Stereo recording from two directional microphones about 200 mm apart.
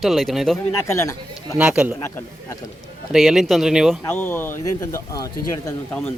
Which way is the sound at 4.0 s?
10° left (ahead or behind).